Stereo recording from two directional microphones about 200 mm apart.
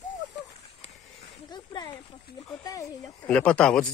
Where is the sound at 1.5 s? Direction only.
20° left (ahead or behind).